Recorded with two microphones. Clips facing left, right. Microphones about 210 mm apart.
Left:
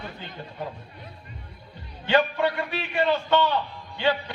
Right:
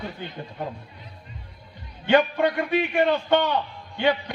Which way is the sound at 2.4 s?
15° right (ahead or behind).